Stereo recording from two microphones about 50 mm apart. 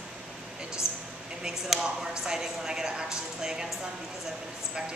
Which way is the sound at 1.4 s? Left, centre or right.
Centre.